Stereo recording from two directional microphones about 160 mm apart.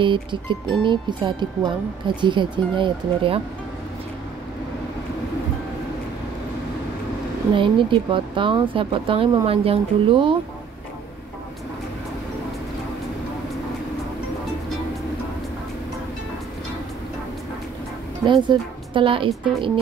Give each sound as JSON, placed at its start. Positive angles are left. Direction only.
{"t": 0.0, "sound": "speech", "side_deg": -30}
{"t": 7.5, "sound": "speech", "side_deg": -30}
{"t": 18.2, "sound": "speech", "side_deg": -30}